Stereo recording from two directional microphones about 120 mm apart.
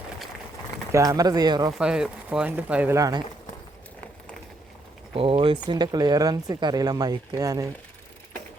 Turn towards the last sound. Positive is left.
turn(degrees=-30)  # may be behind; listen again after turning